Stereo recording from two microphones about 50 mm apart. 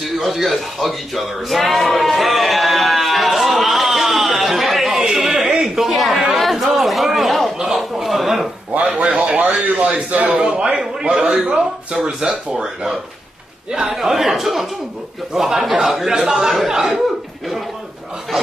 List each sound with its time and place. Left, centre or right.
0.2 s a sound: centre
7.5 s chuckle: centre
8.7 s speech: right
10.4 s speech: centre
13.7 s a man's voice: centre